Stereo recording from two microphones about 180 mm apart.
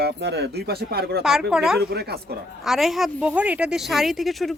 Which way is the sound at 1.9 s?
65° right (ahead or behind).